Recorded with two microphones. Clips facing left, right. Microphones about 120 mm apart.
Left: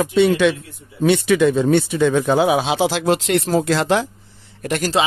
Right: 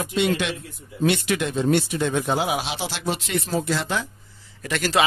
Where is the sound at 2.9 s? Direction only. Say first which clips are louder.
Left 9 dB; 90° left.